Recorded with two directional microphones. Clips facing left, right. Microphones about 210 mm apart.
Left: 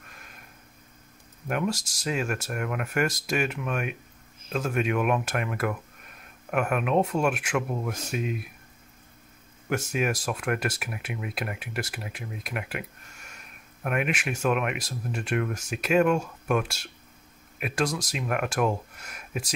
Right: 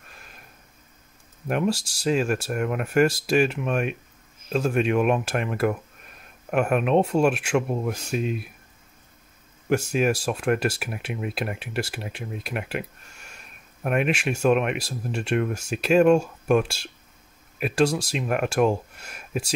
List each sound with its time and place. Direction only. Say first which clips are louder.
1.5 s speech: right 4 dB; 30° right (ahead or behind)
9.7 s speech: right 5 dB; 30° right (ahead or behind)
13.8 s speech: right 5 dB; 30° right (ahead or behind)